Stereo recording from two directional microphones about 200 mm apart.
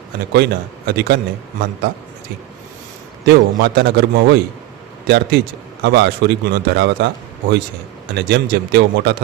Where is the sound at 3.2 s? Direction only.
55° right (ahead or behind).